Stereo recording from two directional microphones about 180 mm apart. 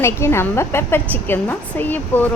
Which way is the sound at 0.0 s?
15° left (ahead or behind).